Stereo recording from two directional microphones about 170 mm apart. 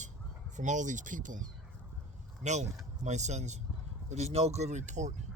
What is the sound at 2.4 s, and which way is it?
Speech, 45° right (ahead or behind).